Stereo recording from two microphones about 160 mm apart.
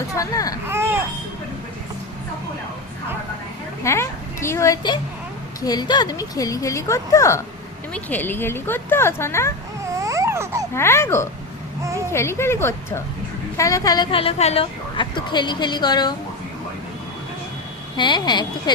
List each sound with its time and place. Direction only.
0.1 s baby cry: 20° left (ahead or behind)
0.7 s baby cry: 15° right (ahead or behind)
3.8 s a woman's voice: 15° left (ahead or behind)
10.0 s baby cry: 20° right (ahead or behind)
10.8 s a woman's voice: 15° left (ahead or behind)
11.8 s a sound: 20° right (ahead or behind)
12.1 s a woman's voice: 15° left (ahead or behind)
17.9 s a woman's voice: 30° left (ahead or behind)